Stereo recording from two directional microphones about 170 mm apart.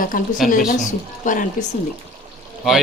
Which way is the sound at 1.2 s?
50° left (ahead or behind).